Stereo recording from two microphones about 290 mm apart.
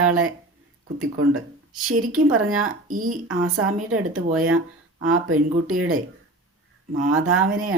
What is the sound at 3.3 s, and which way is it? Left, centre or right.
Speech, right.